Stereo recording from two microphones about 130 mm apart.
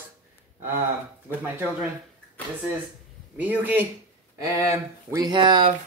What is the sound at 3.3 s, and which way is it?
Speech, 15° right (ahead or behind).